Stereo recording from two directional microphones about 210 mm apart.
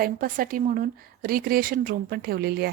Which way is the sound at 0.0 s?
40° right (ahead or behind).